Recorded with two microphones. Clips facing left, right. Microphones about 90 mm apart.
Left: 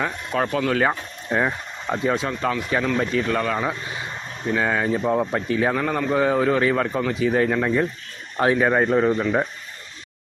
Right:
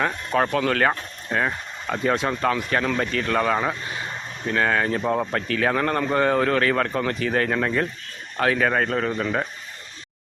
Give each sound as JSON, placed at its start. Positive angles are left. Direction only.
{"t": 0.0, "sound": "a man's voice", "side_deg": 0}
{"t": 2.0, "sound": "a man's voice", "side_deg": 0}
{"t": 3.3, "sound": "speech", "side_deg": -5}
{"t": 4.4, "sound": "a man's voice", "side_deg": 10}
{"t": 5.3, "sound": "a man's voice", "side_deg": 15}
{"t": 5.7, "sound": "a man's voice", "side_deg": 0}
{"t": 8.4, "sound": "a man's voice", "side_deg": 20}